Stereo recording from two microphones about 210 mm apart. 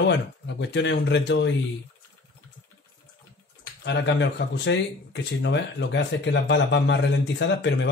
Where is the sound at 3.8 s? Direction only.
55° left (ahead or behind).